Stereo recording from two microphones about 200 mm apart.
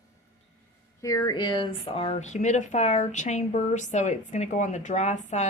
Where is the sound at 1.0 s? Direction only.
15° left (ahead or behind).